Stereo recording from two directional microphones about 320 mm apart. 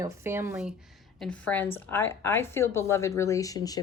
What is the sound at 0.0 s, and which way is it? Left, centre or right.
A woman's voice, centre.